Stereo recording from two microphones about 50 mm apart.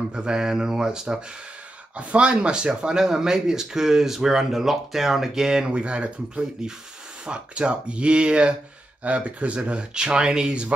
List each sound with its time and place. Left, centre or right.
0.1 s speech: centre
2.0 s speech: right
5.7 s speech: right